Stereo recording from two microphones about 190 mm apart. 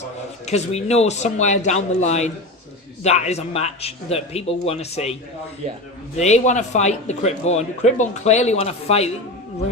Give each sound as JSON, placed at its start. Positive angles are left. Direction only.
{"t": 0.4, "sound": "a man's voice", "side_deg": 35}
{"t": 6.1, "sound": "a man's voice", "side_deg": 35}